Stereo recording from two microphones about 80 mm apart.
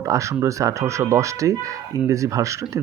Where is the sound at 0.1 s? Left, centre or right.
Right.